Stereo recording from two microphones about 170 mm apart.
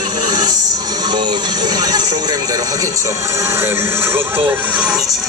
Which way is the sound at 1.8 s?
25° right (ahead or behind).